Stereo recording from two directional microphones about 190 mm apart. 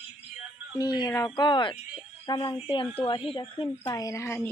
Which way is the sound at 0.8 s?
20° left (ahead or behind).